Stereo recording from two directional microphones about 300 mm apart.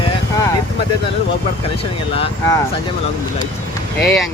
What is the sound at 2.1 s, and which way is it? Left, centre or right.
Speech, centre.